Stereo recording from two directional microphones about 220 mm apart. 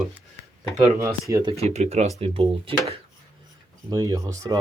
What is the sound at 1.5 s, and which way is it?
Speech, 30° right (ahead or behind).